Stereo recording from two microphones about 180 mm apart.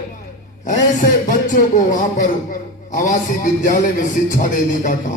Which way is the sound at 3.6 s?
50° left (ahead or behind).